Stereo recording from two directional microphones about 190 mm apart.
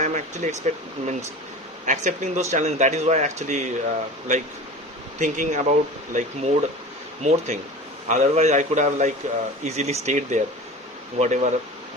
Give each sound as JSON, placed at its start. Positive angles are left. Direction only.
{"t": 0.0, "sound": "speech", "side_deg": -40}